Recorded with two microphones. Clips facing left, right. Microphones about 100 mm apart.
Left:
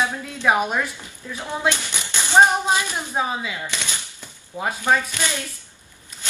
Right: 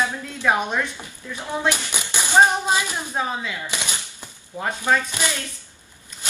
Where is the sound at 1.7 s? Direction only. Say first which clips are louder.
Right 1 dB; 15° right (ahead or behind).